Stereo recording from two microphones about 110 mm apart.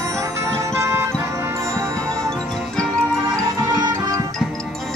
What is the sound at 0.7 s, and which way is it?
Music, 25° right (ahead or behind).